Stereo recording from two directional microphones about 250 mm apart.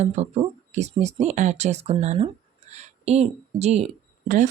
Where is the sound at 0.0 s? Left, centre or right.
Right.